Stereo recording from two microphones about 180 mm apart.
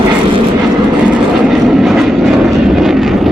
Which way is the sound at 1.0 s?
5° right (ahead or behind).